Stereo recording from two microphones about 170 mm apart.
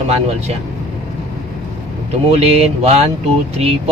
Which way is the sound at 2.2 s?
40° right (ahead or behind).